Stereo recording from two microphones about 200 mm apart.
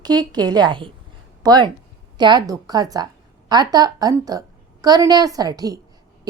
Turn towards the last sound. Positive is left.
turn(degrees=-20)  # may be behind; listen again after turning